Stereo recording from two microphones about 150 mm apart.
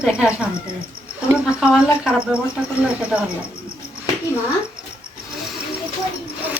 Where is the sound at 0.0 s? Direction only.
5° right (ahead or behind).